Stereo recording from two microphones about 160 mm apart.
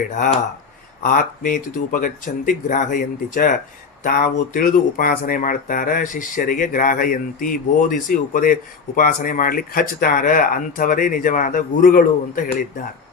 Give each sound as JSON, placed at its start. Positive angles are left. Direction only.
{"t": 1.0, "sound": "speech", "side_deg": 60}